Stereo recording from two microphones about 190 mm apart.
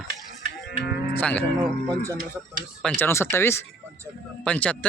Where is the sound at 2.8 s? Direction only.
10° left (ahead or behind).